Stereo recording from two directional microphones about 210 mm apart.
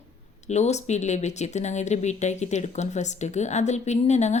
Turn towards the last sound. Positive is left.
turn(degrees=35)  # may be behind; listen again after turning